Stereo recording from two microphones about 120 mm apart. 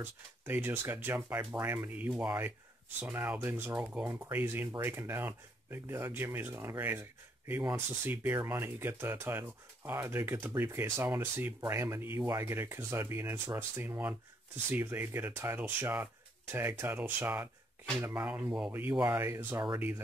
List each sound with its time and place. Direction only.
0.0 s speech: 20° right (ahead or behind)